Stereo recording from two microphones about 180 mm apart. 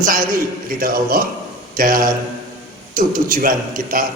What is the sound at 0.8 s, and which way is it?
A man's voice, 55° right (ahead or behind).